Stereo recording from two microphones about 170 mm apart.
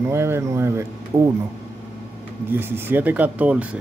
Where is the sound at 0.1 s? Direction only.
15° right (ahead or behind).